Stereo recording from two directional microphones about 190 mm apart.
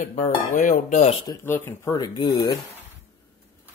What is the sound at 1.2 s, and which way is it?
Speech, 15° left (ahead or behind).